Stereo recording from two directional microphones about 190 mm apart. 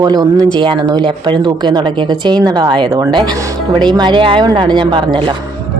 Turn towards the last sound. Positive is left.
turn(degrees=-25)  # may be behind; listen again after turning